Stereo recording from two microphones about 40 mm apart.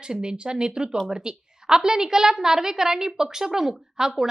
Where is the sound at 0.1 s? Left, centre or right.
Right.